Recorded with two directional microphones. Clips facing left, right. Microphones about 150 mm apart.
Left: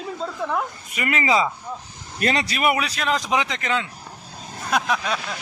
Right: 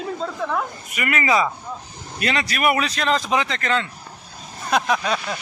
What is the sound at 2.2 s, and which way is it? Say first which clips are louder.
Speech: even; 35° left (ahead or behind).